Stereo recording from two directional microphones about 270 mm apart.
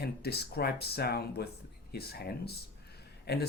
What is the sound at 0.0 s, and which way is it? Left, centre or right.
Speech, left.